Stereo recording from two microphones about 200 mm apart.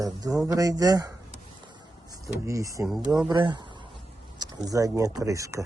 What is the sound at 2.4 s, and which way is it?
Speech, 15° right (ahead or behind).